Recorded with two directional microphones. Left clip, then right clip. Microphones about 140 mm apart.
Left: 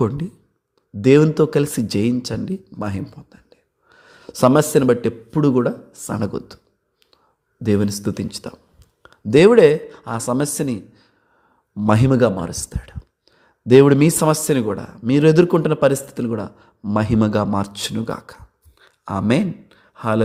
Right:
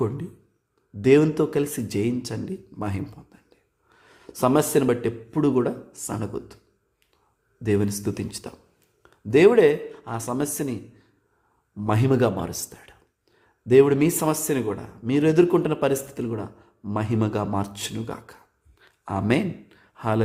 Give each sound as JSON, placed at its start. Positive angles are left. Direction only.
{"t": 1.0, "sound": "speech", "side_deg": 30}
{"t": 7.6, "sound": "speech", "side_deg": 30}
{"t": 12.1, "sound": "speech", "side_deg": 25}
{"t": 18.8, "sound": "a sound", "side_deg": 20}
{"t": 19.3, "sound": "speech", "side_deg": 25}